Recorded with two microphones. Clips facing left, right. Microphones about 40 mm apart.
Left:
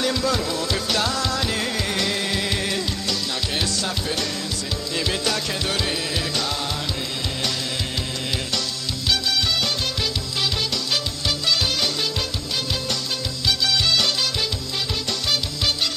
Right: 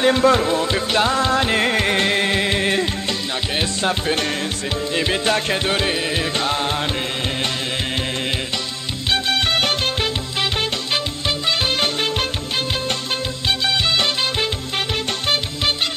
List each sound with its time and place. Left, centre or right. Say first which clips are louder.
0.0 s music: right 8 dB; right
9.1 s music: right 4 dB; right
11.8 s music: right 4 dB; right
13.5 s music: right 2 dB; right